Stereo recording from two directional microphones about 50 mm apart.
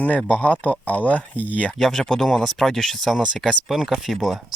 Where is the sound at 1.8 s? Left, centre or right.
Centre.